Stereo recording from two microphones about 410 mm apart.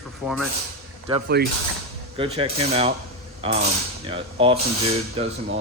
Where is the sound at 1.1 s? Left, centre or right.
Centre.